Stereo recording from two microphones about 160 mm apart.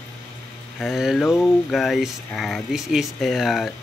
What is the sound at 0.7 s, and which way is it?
Speech, centre (ahead or behind).